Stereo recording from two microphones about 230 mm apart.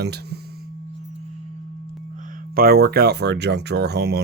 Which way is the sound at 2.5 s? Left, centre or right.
Right.